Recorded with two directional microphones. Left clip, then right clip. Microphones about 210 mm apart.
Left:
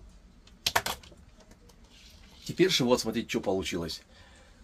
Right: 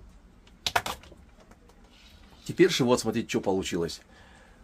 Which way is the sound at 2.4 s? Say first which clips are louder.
Right 2 dB; 30° right (ahead or behind).